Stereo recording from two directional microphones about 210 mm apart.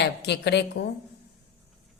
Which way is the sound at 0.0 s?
55° left (ahead or behind).